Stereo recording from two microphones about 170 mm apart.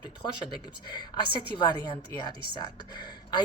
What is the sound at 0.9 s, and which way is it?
A woman's voice, 25° left (ahead or behind).